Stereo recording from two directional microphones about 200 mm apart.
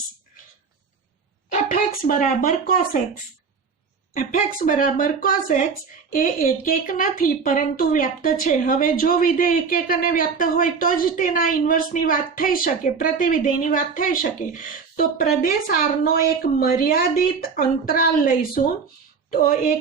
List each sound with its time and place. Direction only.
1.5 s speech: 45° left (ahead or behind)
4.1 s a woman's voice: 40° left (ahead or behind)